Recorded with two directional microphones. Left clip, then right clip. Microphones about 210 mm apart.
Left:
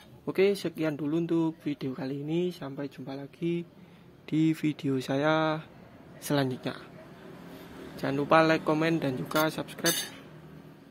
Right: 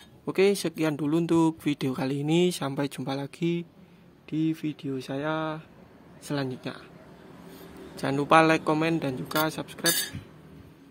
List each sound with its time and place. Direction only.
0.2 s speech: 10° right (ahead or behind)
4.3 s speech: 10° left (ahead or behind)
7.9 s a man's voice: 10° right (ahead or behind)